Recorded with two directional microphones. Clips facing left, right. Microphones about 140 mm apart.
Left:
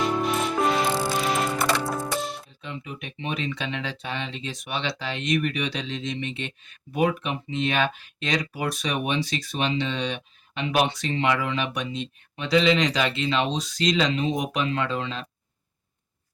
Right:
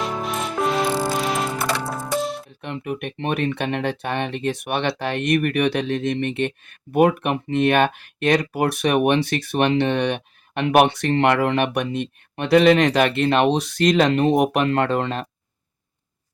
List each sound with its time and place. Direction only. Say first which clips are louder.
0.0 s music: left 2 dB; centre (ahead or behind)
2.6 s speech: right 8 dB; 65° right (ahead or behind)